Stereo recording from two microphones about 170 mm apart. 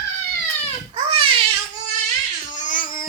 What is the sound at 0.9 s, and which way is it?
Crying, 30° right (ahead or behind).